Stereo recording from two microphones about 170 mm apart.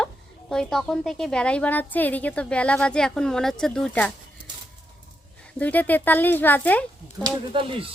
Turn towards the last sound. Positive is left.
turn(degrees=-30)  # may be behind; listen again after turning